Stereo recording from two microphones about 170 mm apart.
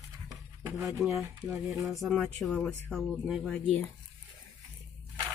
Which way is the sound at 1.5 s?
20° right (ahead or behind).